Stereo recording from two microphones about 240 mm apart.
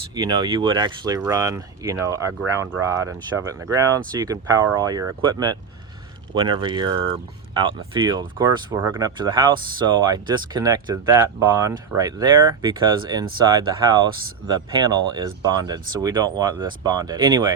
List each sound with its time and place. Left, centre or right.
0.1 s speech: centre